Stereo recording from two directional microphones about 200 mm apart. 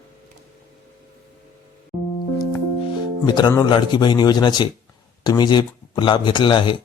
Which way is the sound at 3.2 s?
20° left (ahead or behind).